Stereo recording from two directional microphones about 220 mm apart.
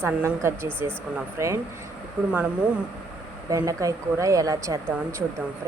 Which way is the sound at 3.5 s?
15° right (ahead or behind).